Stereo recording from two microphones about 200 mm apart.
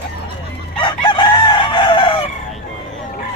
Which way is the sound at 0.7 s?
25° left (ahead or behind).